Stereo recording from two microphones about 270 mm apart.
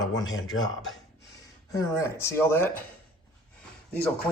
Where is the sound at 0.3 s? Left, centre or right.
Left.